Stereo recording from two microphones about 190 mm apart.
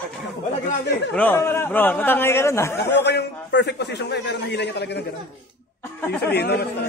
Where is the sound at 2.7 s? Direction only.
60° left (ahead or behind).